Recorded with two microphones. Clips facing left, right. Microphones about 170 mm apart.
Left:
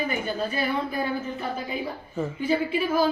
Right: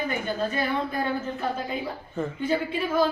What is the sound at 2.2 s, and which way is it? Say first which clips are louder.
Speech: left 1 dB; 5° left (ahead or behind).